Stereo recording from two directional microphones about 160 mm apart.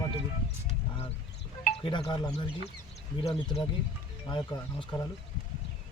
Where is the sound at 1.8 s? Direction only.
30° left (ahead or behind).